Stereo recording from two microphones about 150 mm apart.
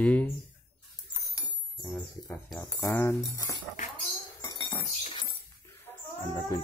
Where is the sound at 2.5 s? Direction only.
20° left (ahead or behind).